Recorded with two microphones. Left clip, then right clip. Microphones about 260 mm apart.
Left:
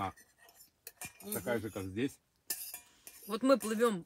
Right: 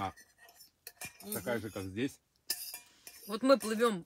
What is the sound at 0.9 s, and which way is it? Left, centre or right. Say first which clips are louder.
Dishes: right 1 dB; centre.